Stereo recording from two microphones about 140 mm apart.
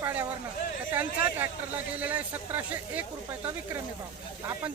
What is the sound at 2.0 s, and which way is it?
Speech, 10° right (ahead or behind).